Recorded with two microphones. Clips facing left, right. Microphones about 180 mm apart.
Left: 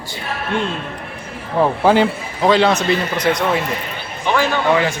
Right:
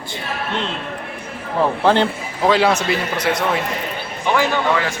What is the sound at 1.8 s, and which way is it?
A man's voice, 5° left (ahead or behind).